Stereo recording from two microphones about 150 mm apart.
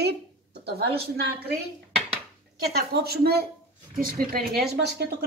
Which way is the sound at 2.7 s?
90° right.